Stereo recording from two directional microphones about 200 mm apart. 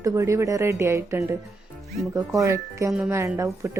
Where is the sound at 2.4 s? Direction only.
15° right (ahead or behind).